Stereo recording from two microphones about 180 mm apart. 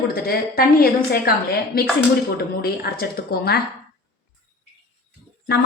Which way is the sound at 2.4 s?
60° left (ahead or behind).